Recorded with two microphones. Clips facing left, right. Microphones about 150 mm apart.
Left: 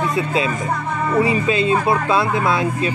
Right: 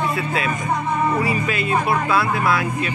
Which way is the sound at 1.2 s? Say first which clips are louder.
Left 5 dB; 25° left (ahead or behind).